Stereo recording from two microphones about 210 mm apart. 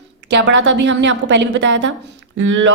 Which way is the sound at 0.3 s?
60° right (ahead or behind).